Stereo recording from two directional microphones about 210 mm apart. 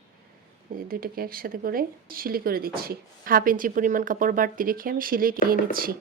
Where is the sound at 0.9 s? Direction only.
45° right (ahead or behind).